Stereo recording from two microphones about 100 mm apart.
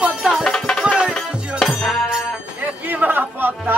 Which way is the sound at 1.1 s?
5° left (ahead or behind).